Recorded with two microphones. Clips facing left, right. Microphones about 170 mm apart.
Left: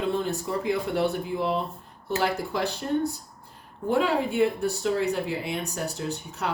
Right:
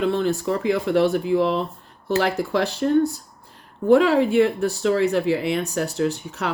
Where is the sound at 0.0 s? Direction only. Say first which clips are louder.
Right 6 dB; 90° right.